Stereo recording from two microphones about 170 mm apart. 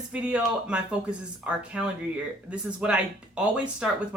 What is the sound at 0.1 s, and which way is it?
Speech, 5° right (ahead or behind).